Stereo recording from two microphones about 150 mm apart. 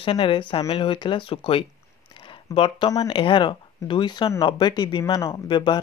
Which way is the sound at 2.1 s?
35° left (ahead or behind).